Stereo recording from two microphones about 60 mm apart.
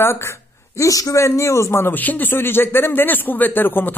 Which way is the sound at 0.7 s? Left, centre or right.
Left.